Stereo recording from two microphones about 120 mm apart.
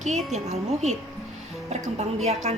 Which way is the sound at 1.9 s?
65° right (ahead or behind).